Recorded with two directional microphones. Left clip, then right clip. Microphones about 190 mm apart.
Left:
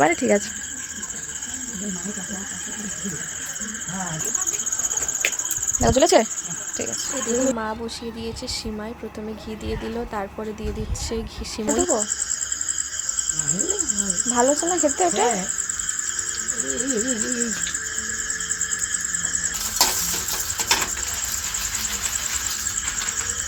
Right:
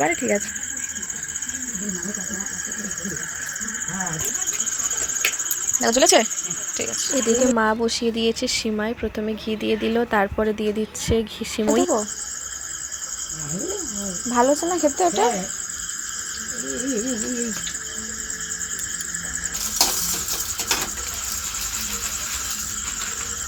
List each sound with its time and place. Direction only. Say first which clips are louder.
0.0 s cricket: left 3 dB; 10° left (ahead or behind)
5.8 s cricket: even; 10° left (ahead or behind)
7.2 s speech: right 5 dB; 35° right (ahead or behind)
11.1 s speech: right 8 dB; 20° right (ahead or behind)
14.3 s speech: right 2 dB; 15° right (ahead or behind)